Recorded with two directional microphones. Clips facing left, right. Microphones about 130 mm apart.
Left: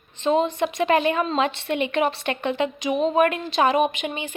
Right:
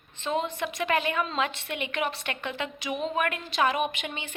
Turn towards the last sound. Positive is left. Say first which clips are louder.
# left 7 dB
turn(degrees=15)  # may be behind; listen again after turning